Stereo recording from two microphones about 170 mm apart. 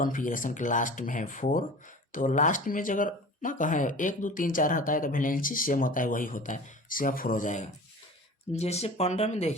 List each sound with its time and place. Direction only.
0.0 s speech: 50° left (ahead or behind)